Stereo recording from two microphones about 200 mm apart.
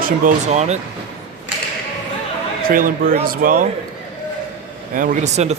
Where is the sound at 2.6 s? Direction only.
45° right (ahead or behind).